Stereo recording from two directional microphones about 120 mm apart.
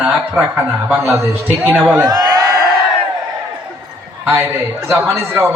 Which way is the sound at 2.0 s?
35° right (ahead or behind).